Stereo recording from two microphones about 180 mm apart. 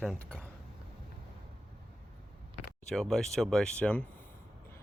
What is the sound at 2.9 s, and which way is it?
Speech, 5° left (ahead or behind).